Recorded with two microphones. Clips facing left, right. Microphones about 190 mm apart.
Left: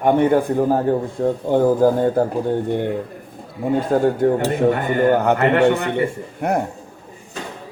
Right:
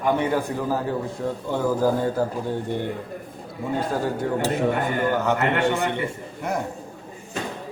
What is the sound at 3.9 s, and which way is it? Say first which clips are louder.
A man's voice: left 11 dB; 50° left (ahead or behind).